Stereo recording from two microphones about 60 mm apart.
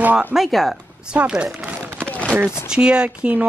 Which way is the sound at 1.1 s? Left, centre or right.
Centre.